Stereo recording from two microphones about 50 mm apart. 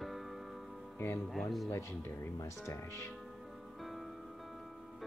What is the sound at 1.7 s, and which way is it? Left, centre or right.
Speech, left.